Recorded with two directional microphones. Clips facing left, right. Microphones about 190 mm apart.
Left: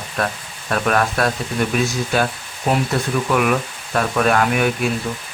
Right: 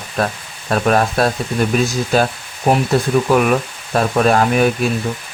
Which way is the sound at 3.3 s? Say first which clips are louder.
Right 2 dB; 35° right (ahead or behind).